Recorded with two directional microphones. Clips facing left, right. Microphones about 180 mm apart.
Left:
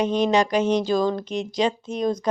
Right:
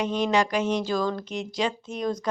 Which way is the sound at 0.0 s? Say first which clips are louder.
Left 4 dB; 20° left (ahead or behind).